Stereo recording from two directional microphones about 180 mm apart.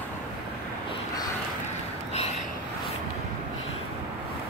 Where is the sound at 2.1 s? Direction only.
35° left (ahead or behind).